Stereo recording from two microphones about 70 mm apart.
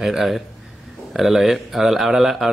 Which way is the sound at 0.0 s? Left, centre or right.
Centre.